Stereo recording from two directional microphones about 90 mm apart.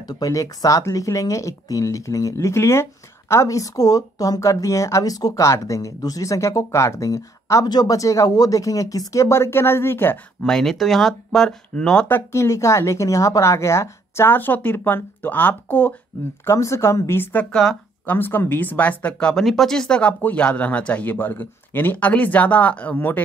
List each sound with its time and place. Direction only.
0.0 s speech: 45° left (ahead or behind)
7.6 s speech: 50° left (ahead or behind); by 10.1 s 25° left (ahead or behind)
10.4 s speech: 5° left (ahead or behind)
12.1 s speech: 30° left (ahead or behind)
16.4 s speech: 35° left (ahead or behind)
17.5 s speech: 5° left (ahead or behind)
18.0 s speech: 25° left (ahead or behind)